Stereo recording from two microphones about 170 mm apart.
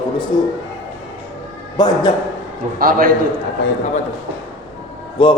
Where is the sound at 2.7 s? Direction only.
55° right (ahead or behind).